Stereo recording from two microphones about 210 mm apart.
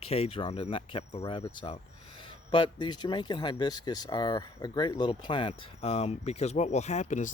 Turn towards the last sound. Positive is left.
turn(degrees=35)  # may be behind; listen again after turning